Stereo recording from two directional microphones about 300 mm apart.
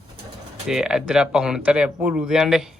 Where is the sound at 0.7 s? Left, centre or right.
Centre.